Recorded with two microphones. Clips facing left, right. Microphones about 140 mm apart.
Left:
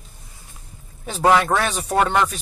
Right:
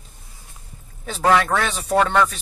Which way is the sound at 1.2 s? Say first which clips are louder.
Left 1 dB; 10° left (ahead or behind).